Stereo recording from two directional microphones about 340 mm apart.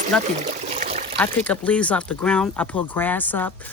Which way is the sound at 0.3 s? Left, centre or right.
Right.